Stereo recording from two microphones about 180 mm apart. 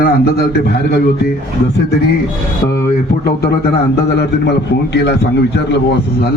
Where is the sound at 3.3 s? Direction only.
60° left (ahead or behind).